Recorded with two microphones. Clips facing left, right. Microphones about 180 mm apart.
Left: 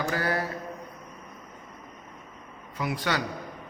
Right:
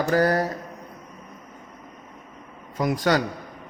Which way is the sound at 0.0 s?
40° right (ahead or behind).